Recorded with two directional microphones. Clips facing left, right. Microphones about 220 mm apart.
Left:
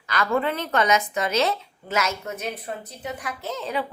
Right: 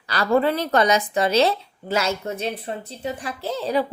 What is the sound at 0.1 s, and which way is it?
A woman's voice, 35° right (ahead or behind).